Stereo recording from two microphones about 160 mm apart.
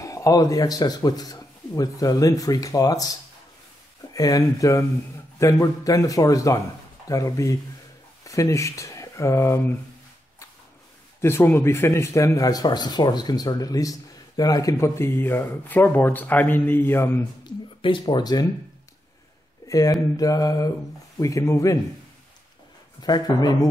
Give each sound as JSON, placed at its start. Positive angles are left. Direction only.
{"t": 0.0, "sound": "speech", "side_deg": 20}
{"t": 11.1, "sound": "speech", "side_deg": 15}
{"t": 17.5, "sound": "speech", "side_deg": 25}
{"t": 19.7, "sound": "speech", "side_deg": 20}
{"t": 23.0, "sound": "speech", "side_deg": 25}